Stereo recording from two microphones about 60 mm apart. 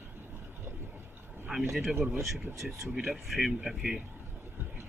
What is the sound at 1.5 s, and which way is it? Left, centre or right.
Speech, centre.